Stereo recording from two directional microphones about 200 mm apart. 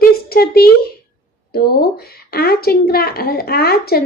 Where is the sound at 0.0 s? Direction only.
50° left (ahead or behind).